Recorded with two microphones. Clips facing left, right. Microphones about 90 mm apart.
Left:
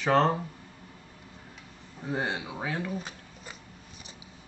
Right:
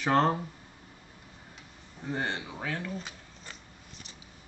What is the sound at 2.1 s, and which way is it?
Speech, 10° left (ahead or behind).